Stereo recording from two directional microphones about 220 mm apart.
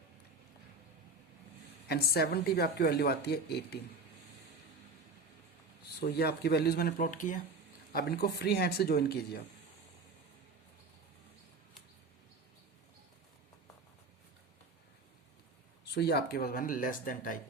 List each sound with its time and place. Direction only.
1.9 s a woman's voice: 45° left (ahead or behind)
5.8 s a woman's voice: 45° left (ahead or behind)
16.0 s speech: 45° left (ahead or behind)